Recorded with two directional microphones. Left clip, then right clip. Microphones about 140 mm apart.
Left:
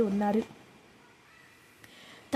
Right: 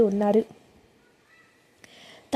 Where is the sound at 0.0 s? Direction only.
45° right (ahead or behind).